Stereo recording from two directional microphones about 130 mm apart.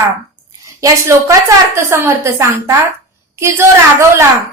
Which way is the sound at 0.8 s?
20° right (ahead or behind).